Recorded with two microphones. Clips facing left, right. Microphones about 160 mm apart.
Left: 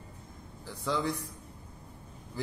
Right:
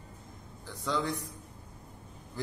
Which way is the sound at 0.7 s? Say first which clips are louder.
Left 1 dB; 5° left (ahead or behind).